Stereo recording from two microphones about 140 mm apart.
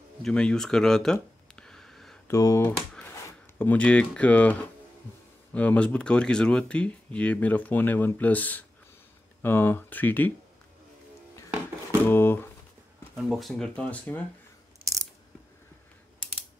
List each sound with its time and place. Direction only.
0.2 s a sound: 5° left (ahead or behind)
2.2 s speech: 20° left (ahead or behind)
12.1 s speech: 15° left (ahead or behind)
13.2 s speech: centre (ahead or behind)